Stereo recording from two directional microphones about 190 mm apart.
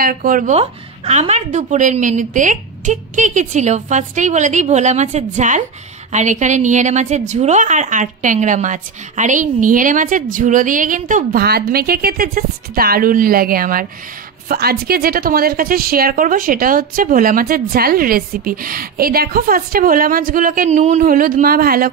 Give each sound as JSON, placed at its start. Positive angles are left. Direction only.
{"t": 0.0, "sound": "a woman's voice", "side_deg": -50}